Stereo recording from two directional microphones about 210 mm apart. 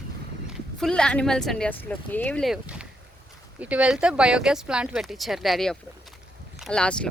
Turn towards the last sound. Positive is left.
turn(degrees=5)  # may be behind; listen again after turning